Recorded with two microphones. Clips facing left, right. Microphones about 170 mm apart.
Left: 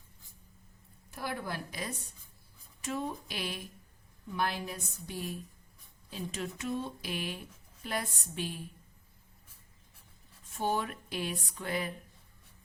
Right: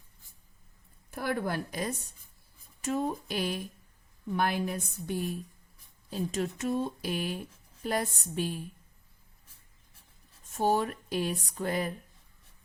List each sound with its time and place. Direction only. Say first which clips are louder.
1.1 s speech: right 6 dB; 55° right (ahead or behind)
4.3 s speech: right 5 dB; 50° right (ahead or behind)
10.5 s a sound: right 5 dB; 40° right (ahead or behind)